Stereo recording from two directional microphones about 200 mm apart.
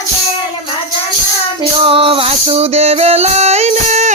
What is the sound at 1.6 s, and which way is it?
Male singing, 30° right (ahead or behind).